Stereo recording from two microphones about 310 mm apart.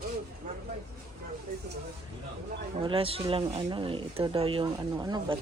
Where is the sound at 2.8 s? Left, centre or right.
Centre.